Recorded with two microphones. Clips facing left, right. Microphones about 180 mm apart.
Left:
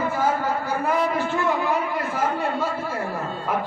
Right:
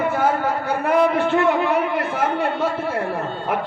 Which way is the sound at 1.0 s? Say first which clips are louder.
Right 6 dB; 65° right (ahead or behind).